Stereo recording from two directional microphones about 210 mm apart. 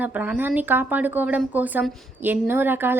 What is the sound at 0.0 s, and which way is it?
A woman's voice, 10° right (ahead or behind).